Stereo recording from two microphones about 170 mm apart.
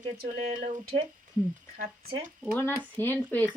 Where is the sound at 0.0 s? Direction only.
40° right (ahead or behind).